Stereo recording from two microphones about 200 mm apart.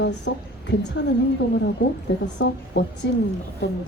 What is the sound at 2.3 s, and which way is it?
Speech, 60° left (ahead or behind).